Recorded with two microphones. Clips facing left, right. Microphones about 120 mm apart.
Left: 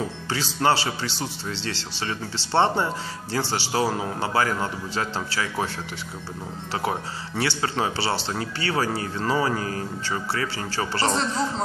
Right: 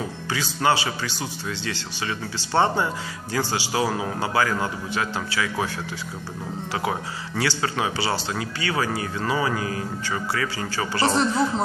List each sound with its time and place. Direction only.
0.3 s speech: 35° left (ahead or behind)
2.5 s a man's voice: 30° left (ahead or behind)
6.9 s speech: 25° left (ahead or behind)
11.0 s a man's voice: 15° right (ahead or behind)